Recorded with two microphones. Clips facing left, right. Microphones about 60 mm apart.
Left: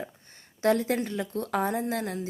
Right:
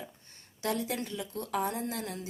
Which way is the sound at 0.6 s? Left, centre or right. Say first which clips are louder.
Left 8 dB; left.